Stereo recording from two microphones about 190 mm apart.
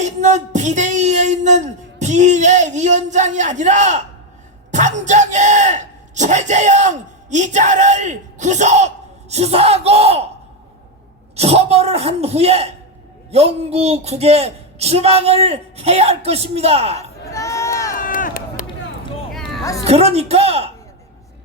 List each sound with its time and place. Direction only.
0.0 s speech: 40° right (ahead or behind)
11.3 s speech: 35° right (ahead or behind)
17.2 s crowd: 15° left (ahead or behind)
17.9 s run: 45° left (ahead or behind)
19.3 s a sound: centre (ahead or behind)
19.9 s speech: 35° right (ahead or behind)